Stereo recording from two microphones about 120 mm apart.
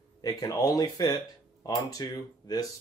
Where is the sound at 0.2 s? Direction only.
30° left (ahead or behind).